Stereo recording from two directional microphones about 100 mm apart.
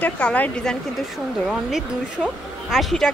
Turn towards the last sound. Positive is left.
turn(degrees=5)  # may be behind; listen again after turning